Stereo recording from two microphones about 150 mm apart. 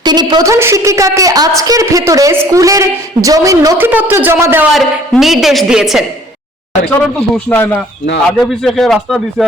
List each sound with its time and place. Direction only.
0.0 s a woman's voice: 30° right (ahead or behind)
4.7 s a woman's voice: centre (ahead or behind)
7.3 s speech: 10° left (ahead or behind)
8.4 s a woman's voice: centre (ahead or behind)